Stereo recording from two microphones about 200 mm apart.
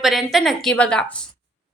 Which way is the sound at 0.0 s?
Centre (ahead or behind).